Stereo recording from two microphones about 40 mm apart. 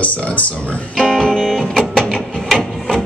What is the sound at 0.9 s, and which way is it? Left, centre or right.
Music, centre.